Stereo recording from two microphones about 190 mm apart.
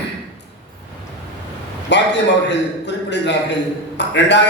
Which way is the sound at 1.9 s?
65° left (ahead or behind).